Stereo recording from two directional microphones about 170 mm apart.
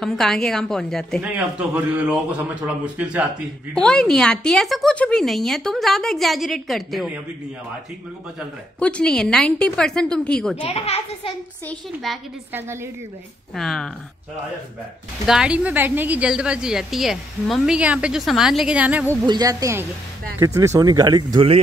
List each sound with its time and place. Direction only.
0.0 s a woman's voice: centre (ahead or behind)
3.7 s a woman's voice: 5° left (ahead or behind)
8.7 s a woman's voice: 5° left (ahead or behind)
10.6 s a child's voice: 35° left (ahead or behind)
11.6 s a woman's voice: 5° left (ahead or behind)
12.5 s a man's voice: 15° right (ahead or behind)
13.6 s a woman's voice: centre (ahead or behind)
15.2 s a woman's voice: 5° right (ahead or behind)
19.2 s speech: 20° right (ahead or behind)